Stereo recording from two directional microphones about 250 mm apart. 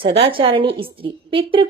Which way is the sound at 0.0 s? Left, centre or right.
Right.